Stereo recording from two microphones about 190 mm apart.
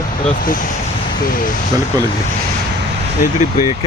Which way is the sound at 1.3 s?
45° left (ahead or behind).